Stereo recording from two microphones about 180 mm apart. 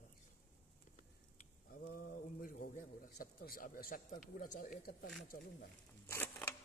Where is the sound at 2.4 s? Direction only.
50° left (ahead or behind).